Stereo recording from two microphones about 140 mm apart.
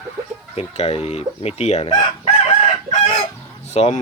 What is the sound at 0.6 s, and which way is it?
Speech, 45° left (ahead or behind).